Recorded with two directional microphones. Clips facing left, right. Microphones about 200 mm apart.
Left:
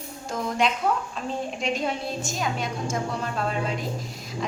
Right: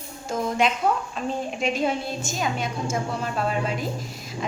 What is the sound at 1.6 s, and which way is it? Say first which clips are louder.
A woman's voice: right 4 dB; centre (ahead or behind).